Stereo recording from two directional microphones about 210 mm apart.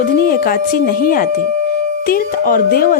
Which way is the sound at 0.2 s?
45° left (ahead or behind).